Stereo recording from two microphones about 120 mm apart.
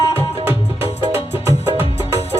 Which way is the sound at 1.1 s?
20° right (ahead or behind).